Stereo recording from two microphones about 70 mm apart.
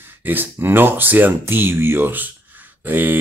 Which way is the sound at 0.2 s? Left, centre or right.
Right.